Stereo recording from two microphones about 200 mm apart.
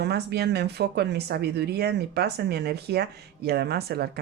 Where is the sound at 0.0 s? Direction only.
55° right (ahead or behind).